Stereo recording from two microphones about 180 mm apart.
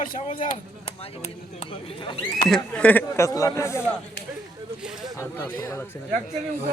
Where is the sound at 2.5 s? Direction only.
5° left (ahead or behind).